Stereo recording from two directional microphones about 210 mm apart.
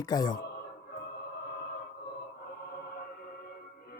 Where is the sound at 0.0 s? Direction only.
20° left (ahead or behind).